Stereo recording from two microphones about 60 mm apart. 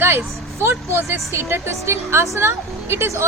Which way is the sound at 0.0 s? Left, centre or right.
Right.